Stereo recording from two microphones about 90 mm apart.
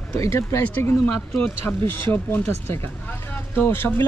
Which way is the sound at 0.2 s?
30° left (ahead or behind).